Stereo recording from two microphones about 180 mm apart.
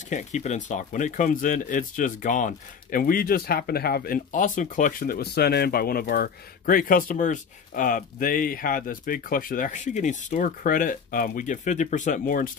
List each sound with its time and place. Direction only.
0.1 s speech: 40° left (ahead or behind)